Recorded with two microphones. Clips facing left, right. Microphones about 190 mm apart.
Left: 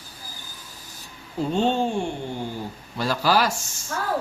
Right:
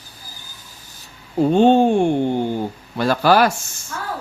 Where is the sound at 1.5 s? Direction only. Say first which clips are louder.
Right 9 dB; 55° right (ahead or behind).